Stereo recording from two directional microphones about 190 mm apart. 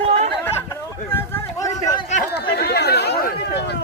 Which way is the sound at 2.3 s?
60° left (ahead or behind).